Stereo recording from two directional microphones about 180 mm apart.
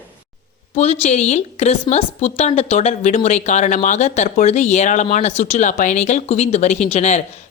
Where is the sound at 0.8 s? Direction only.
35° left (ahead or behind).